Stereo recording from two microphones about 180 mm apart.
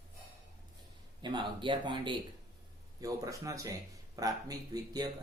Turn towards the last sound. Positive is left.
turn(degrees=-20)  # may be behind; listen again after turning